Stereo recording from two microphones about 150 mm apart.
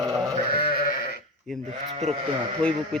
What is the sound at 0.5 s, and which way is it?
Sheep, 85° left.